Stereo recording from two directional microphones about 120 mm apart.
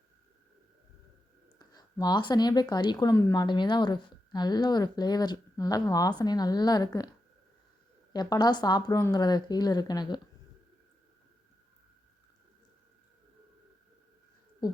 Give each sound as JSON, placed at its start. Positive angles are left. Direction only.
{"t": 1.5, "sound": "speech", "side_deg": 35}
{"t": 3.3, "sound": "speech", "side_deg": 40}
{"t": 8.1, "sound": "speech", "side_deg": 35}